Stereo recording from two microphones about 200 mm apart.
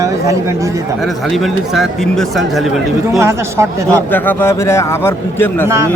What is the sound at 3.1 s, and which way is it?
Speech, 15° right (ahead or behind).